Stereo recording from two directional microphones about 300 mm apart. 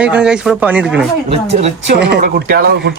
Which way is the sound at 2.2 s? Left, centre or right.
Right.